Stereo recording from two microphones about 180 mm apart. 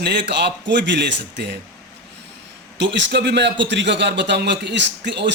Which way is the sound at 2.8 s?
80° right.